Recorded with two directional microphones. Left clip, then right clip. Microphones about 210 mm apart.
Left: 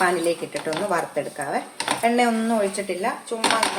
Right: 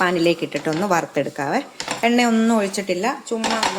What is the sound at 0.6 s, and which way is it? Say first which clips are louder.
Speech: right 3 dB; 40° right (ahead or behind).